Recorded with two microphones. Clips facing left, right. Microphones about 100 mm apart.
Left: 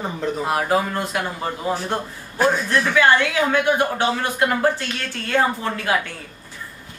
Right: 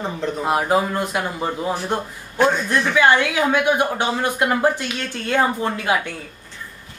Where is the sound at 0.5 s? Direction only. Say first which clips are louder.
Right 3 dB; 20° right (ahead or behind).